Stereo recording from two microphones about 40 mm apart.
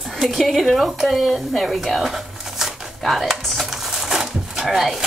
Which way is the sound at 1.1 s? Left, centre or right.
Centre.